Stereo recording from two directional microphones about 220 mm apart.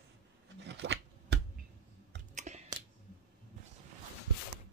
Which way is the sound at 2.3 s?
30° right (ahead or behind).